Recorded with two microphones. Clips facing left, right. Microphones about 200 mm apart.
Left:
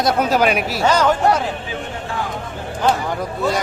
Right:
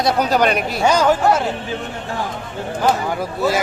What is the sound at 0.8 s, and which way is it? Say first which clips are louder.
Speech: right 1 dB; 10° right (ahead or behind).